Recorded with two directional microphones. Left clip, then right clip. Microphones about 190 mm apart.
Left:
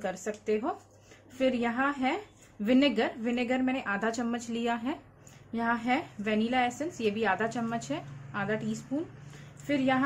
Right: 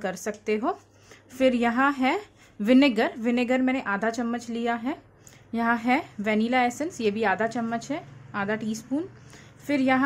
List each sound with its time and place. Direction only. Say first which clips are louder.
0.0 s a woman's voice: right 4 dB; 30° right (ahead or behind)